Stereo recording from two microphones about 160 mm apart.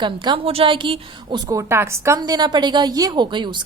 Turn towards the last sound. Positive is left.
turn(degrees=-30)  # may be behind; listen again after turning